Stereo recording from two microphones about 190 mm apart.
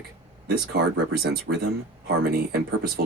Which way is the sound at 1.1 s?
60° right (ahead or behind).